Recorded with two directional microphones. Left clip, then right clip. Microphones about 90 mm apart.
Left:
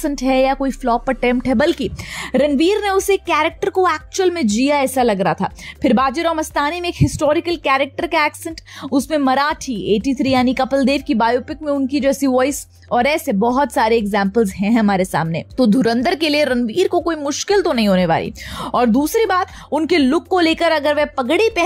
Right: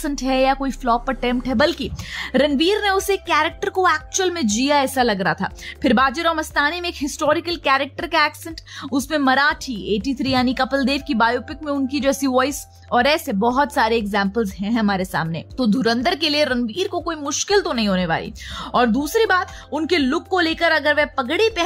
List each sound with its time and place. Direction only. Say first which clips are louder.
0.0 s a woman's voice: left 3 dB; 30° left (ahead or behind)
14.6 s a woman's voice: left 5 dB; 55° left (ahead or behind)
17.2 s speech: left 3 dB; 35° left (ahead or behind)
17.6 s speech: left 5 dB; 50° left (ahead or behind)